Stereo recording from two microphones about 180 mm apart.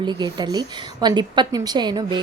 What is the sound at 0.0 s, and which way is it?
A woman's voice, 25° right (ahead or behind).